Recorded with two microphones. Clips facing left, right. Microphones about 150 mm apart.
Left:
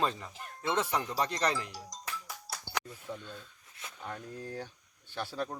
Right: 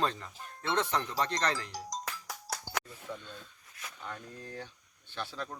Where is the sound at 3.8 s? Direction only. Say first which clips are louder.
Left 1 dB; 25° left (ahead or behind).